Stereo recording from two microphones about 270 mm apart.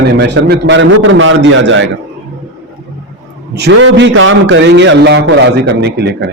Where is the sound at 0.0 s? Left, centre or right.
Right.